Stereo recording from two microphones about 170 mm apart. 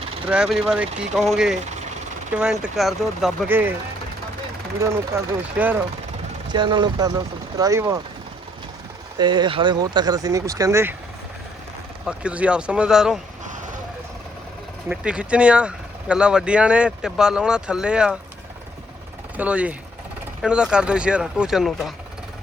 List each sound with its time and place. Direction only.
0.3 s speech: 5° right (ahead or behind)
4.8 s speech: 15° right (ahead or behind)
6.5 s speech: 25° right (ahead or behind)
9.1 s speech: 25° right (ahead or behind)
12.0 s speech: 5° right (ahead or behind)
14.8 s speech: 5° right (ahead or behind)
19.4 s speech: 10° right (ahead or behind)